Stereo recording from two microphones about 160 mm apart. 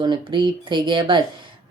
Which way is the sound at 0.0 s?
30° right (ahead or behind).